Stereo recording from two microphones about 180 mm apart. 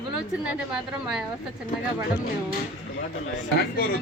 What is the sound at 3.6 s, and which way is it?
Speech, 55° left (ahead or behind).